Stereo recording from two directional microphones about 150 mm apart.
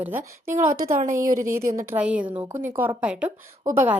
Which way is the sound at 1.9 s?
10° right (ahead or behind).